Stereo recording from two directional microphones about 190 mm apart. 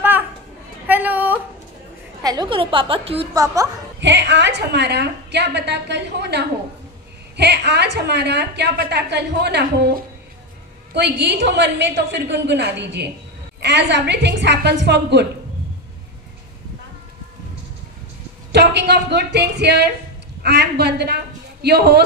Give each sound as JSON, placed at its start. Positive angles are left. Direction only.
{"t": 0.8, "sound": "a sound", "side_deg": -10}
{"t": 2.2, "sound": "a woman's voice", "side_deg": -20}
{"t": 4.0, "sound": "a woman's voice", "side_deg": -70}
{"t": 18.5, "sound": "a man's voice", "side_deg": -65}